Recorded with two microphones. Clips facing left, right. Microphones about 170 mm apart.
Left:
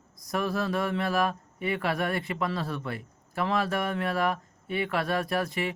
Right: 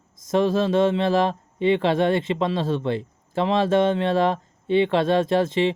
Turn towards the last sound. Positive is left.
turn(degrees=-25)  # may be behind; listen again after turning